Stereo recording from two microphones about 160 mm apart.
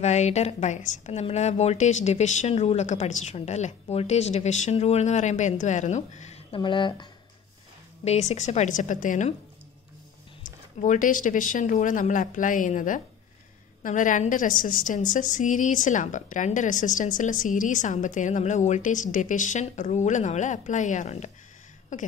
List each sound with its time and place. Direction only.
0.0 s a woman's voice: 45° left (ahead or behind)
6.5 s speech: 30° left (ahead or behind)
8.0 s a woman's voice: 45° left (ahead or behind)
10.4 s a woman's voice: 50° left (ahead or behind)